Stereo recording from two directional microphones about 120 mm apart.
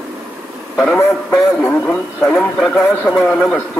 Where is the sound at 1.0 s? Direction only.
20° left (ahead or behind).